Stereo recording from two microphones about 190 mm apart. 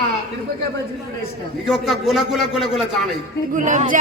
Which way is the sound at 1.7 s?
Centre (ahead or behind).